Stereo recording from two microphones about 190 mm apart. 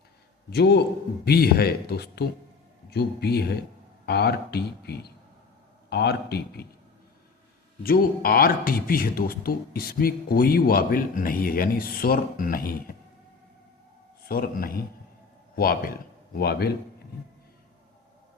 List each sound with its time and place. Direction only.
0.5 s speech: 60° left (ahead or behind)
7.9 s a man's voice: 50° left (ahead or behind)
14.3 s a man's voice: 50° left (ahead or behind)